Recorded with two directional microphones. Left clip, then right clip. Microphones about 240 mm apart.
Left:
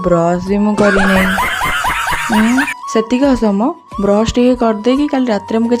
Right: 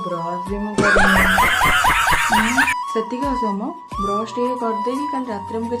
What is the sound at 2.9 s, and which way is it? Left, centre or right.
Speech, left.